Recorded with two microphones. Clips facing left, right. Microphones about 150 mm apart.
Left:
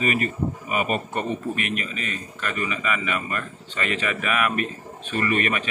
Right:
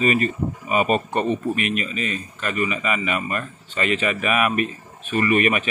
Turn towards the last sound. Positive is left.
turn(degrees=-15)  # may be behind; listen again after turning